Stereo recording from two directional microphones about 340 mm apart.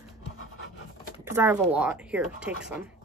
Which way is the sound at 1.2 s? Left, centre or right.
Centre.